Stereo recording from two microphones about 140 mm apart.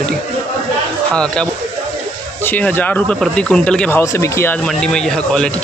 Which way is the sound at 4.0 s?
20° left (ahead or behind).